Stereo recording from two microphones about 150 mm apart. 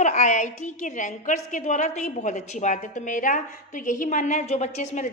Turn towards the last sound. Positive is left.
turn(degrees=50)  # may be behind; listen again after turning